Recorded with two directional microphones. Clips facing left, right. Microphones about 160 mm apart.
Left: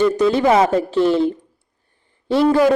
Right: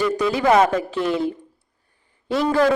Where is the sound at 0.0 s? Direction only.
30° left (ahead or behind).